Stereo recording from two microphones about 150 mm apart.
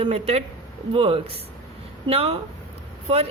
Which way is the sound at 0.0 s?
45° right (ahead or behind).